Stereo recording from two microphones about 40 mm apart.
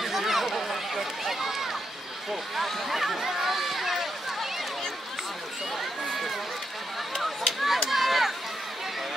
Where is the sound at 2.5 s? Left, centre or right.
Centre.